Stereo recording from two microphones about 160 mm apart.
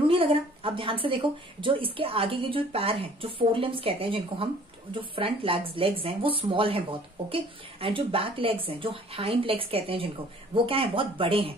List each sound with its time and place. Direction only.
0.1 s speech: 35° right (ahead or behind)